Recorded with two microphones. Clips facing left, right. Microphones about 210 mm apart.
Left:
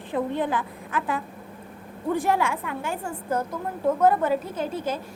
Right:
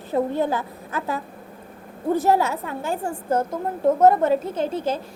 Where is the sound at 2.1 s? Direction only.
40° right (ahead or behind).